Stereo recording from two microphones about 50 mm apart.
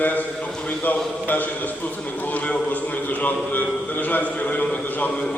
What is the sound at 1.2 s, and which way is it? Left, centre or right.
A man's voice, left.